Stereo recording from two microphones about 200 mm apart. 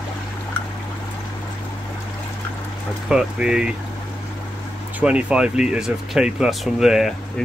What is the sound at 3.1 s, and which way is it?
Speech, 5° right (ahead or behind).